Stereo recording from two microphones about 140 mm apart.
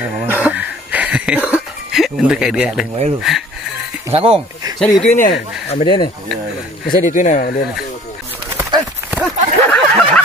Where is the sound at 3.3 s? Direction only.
5° right (ahead or behind).